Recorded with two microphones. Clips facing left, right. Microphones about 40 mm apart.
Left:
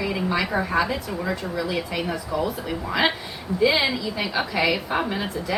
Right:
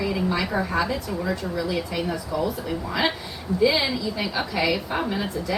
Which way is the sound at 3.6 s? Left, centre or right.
Centre.